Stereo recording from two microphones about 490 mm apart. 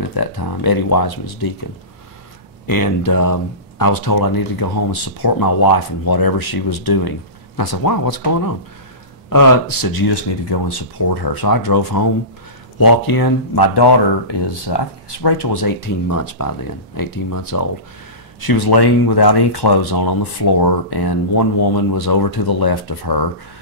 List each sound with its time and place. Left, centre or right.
0.1 s speech: left
2.6 s speech: left